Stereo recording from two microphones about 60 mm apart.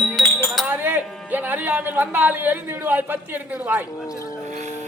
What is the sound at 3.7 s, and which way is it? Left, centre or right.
Speech, right.